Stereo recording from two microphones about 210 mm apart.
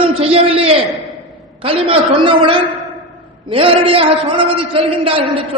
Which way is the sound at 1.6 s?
25° right (ahead or behind).